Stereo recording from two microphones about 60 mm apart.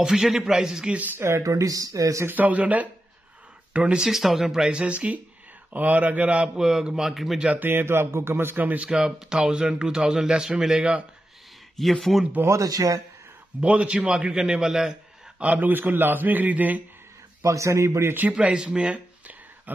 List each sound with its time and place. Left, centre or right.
0.0 s speech: centre
0.9 s speech: right
1.4 s speech: right
2.2 s a man's voice: right
4.1 s a man's voice: centre
7.4 s speech: right
8.6 s a man's voice: right
8.9 s speech: centre
11.7 s speech: centre
12.4 s speech: right
13.6 s speech: right
15.4 s a man's voice: right
17.4 s speech: right
18.3 s speech: centre